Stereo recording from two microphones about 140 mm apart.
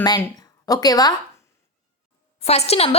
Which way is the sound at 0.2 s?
25° left (ahead or behind).